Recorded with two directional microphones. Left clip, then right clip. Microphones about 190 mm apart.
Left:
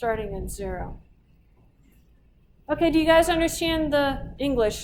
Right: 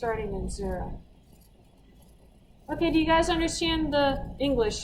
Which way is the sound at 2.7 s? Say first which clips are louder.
Left 5 dB; 15° left (ahead or behind).